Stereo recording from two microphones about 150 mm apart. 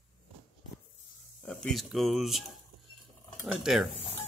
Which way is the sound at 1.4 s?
5° left (ahead or behind).